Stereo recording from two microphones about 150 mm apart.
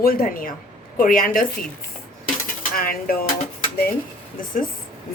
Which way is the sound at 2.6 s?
70° left (ahead or behind).